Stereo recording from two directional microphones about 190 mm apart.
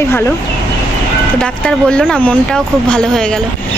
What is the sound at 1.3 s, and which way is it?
Speech, 5° left (ahead or behind).